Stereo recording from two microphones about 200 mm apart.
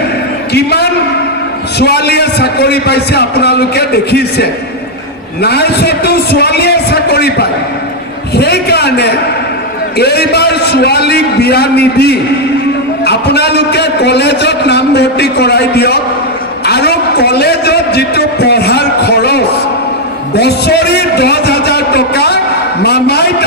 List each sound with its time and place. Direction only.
0.5 s a man's voice: 55° left (ahead or behind)
16.6 s a sound: 55° left (ahead or behind)
20.3 s a man's voice: 55° left (ahead or behind)